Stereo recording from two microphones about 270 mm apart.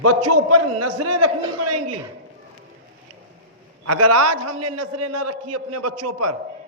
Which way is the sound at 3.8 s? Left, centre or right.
Right.